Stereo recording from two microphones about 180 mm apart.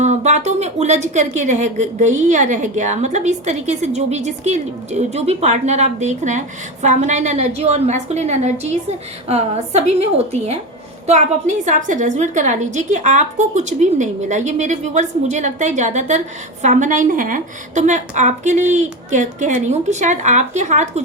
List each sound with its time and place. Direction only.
0.0 s a woman's voice: 40° right (ahead or behind)